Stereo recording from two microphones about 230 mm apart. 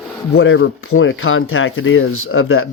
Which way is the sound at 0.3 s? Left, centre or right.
Left.